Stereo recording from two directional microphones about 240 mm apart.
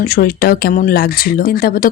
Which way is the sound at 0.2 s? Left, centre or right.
Left.